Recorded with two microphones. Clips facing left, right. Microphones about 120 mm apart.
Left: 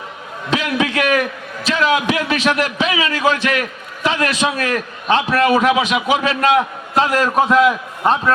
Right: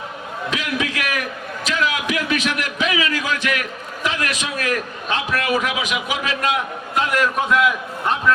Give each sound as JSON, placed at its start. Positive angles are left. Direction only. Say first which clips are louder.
{"t": 0.5, "sound": "a man's voice", "louder": "left 8 dB", "side_deg": 30}